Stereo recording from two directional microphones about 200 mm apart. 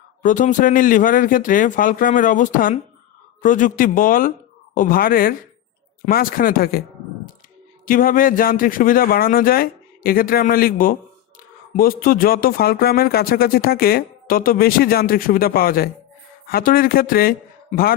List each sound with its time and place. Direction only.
0.2 s speech: 40° left (ahead or behind)
7.9 s speech: 45° left (ahead or behind)